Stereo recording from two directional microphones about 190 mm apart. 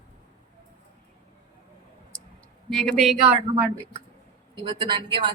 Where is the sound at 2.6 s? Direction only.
5° left (ahead or behind).